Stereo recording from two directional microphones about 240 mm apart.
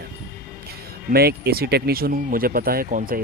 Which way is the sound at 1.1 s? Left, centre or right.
Right.